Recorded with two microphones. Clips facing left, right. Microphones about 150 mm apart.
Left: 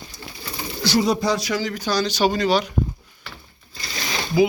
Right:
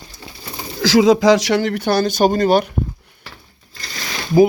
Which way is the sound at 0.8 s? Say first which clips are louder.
Right 8 dB; 90° right.